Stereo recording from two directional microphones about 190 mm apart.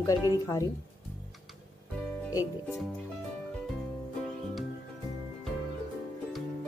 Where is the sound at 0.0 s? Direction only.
20° left (ahead or behind).